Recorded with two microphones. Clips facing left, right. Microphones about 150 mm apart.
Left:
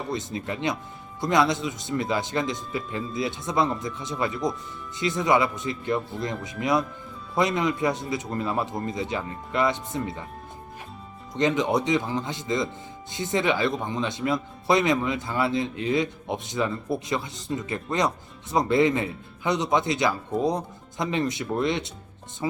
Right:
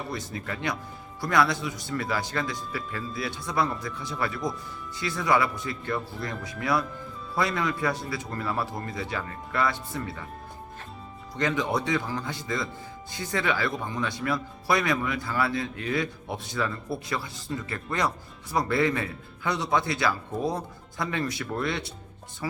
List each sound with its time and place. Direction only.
0.1 s speech: 20° left (ahead or behind)
11.3 s speech: 20° left (ahead or behind)